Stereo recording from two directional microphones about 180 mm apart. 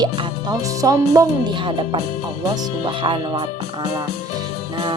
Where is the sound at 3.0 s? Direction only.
25° right (ahead or behind).